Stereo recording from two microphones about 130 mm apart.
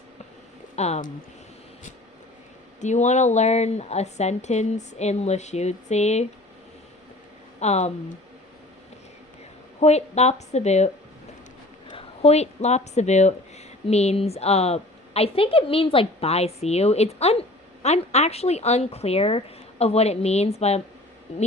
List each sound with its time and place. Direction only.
0.8 s speech: 60° left (ahead or behind)
2.8 s speech: 65° left (ahead or behind)
7.6 s speech: 60° left (ahead or behind)
9.8 s speech: 55° left (ahead or behind)
11.9 s a woman's voice: 55° left (ahead or behind)